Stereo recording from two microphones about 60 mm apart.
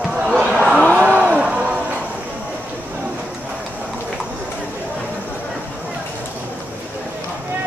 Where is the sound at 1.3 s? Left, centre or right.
Centre.